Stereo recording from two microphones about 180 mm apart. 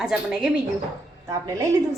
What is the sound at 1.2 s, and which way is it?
Speech, 15° right (ahead or behind).